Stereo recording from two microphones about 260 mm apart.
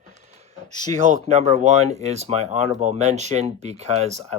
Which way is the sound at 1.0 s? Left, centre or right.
Right.